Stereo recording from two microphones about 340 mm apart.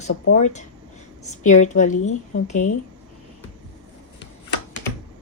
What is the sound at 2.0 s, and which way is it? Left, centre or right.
Speech, left.